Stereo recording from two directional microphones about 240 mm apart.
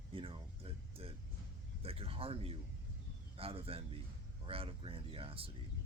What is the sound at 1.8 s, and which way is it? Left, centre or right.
Speech, right.